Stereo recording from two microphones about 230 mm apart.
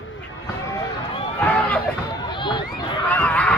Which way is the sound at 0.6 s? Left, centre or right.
Centre.